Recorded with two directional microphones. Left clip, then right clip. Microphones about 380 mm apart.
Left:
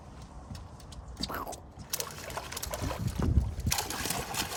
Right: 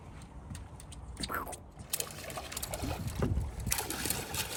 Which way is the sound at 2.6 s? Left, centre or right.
Centre.